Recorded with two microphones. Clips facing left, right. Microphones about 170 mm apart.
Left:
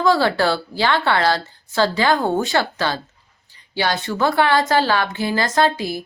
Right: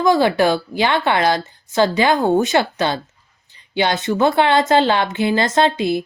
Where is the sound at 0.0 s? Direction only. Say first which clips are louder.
Right 2 dB; 15° right (ahead or behind).